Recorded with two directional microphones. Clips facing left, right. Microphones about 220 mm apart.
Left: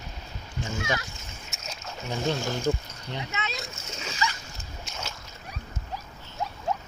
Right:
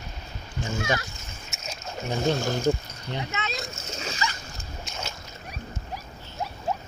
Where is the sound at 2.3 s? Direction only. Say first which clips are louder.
Right 2 dB; 40° right (ahead or behind).